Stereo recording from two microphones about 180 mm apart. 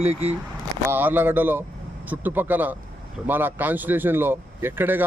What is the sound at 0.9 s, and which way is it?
Speech, 10° right (ahead or behind).